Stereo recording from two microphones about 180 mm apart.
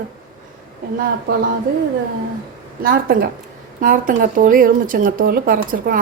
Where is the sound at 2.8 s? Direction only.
55° right (ahead or behind).